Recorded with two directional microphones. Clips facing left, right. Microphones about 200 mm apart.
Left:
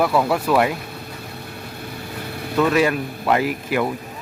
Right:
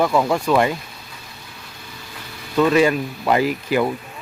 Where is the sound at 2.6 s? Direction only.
5° left (ahead or behind).